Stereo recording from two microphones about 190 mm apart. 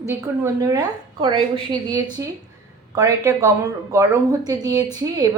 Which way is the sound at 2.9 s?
20° right (ahead or behind).